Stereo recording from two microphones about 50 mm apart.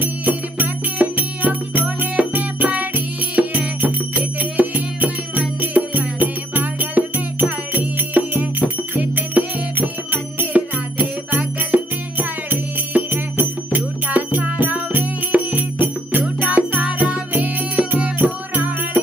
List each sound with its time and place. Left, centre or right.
0.0 s music: right